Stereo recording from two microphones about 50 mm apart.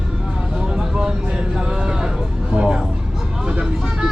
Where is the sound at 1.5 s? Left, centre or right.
Centre.